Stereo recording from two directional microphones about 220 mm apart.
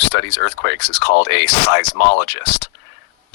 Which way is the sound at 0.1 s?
55° left (ahead or behind).